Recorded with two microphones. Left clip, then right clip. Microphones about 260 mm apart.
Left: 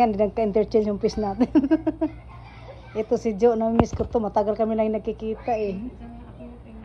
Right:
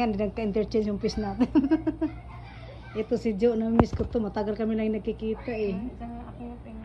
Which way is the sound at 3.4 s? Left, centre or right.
Centre.